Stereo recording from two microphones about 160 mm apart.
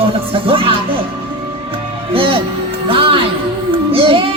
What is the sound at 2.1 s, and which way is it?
Speech, 35° right (ahead or behind).